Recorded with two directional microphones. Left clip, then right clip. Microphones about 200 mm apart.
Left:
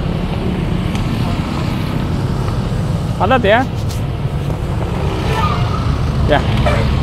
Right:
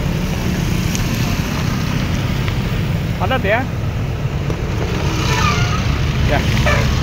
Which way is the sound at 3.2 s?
30° left (ahead or behind).